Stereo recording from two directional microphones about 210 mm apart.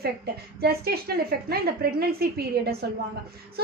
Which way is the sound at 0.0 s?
50° right (ahead or behind).